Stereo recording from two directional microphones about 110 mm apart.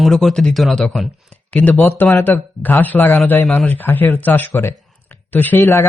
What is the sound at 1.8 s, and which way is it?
A man's voice, 25° left (ahead or behind).